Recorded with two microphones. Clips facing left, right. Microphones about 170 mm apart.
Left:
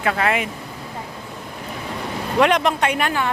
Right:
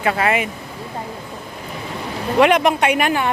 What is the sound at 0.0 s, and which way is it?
Speech, 5° right (ahead or behind).